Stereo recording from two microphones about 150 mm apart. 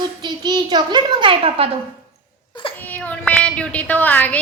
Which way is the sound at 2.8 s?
10° left (ahead or behind).